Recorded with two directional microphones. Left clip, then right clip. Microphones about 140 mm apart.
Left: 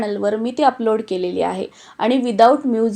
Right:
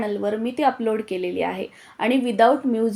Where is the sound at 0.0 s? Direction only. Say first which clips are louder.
Left 4 dB; 30° left (ahead or behind).